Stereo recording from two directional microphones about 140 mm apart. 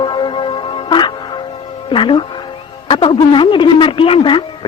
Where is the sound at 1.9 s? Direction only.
35° left (ahead or behind).